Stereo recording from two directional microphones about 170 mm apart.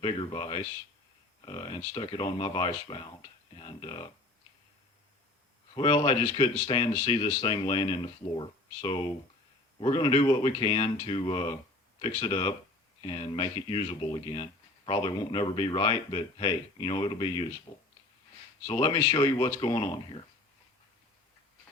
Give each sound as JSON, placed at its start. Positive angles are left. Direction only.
{"t": 0.0, "sound": "speech", "side_deg": 30}
{"t": 5.7, "sound": "speech", "side_deg": 35}